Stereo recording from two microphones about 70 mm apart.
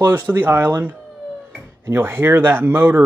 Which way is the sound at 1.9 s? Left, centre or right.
Right.